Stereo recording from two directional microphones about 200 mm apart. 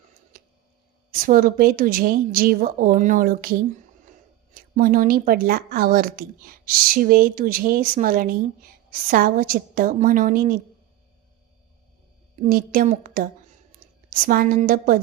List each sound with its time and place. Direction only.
0.3 s a sound: 45° right (ahead or behind)
1.1 s a woman's voice: 45° right (ahead or behind)
12.4 s a woman's voice: 45° right (ahead or behind)